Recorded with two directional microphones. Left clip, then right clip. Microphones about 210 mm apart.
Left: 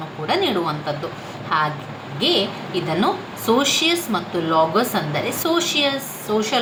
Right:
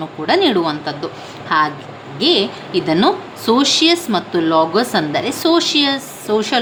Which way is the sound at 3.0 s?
40° right (ahead or behind).